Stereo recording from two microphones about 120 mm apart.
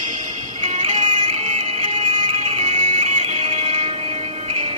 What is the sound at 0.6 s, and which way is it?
Music, 45° right (ahead or behind).